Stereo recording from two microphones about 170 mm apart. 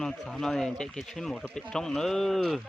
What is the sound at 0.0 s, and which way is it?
Speech, centre (ahead or behind).